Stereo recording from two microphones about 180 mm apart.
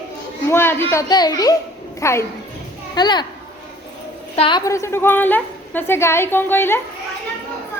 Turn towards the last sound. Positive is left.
turn(degrees=10)  # may be behind; listen again after turning